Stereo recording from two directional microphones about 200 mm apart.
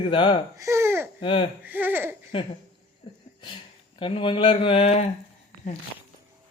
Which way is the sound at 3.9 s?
25° left (ahead or behind).